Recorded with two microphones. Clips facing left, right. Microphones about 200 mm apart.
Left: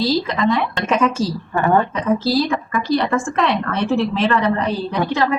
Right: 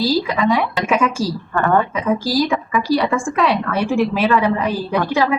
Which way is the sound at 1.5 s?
15° left (ahead or behind).